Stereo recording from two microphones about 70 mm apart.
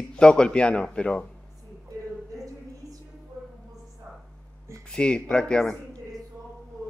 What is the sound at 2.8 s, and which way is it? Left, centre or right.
Music, right.